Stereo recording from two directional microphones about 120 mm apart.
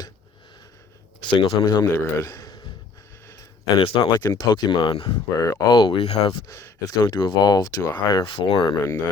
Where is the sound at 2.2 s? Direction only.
30° left (ahead or behind).